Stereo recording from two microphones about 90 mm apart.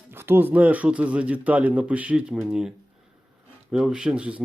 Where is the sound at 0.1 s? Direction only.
25° right (ahead or behind).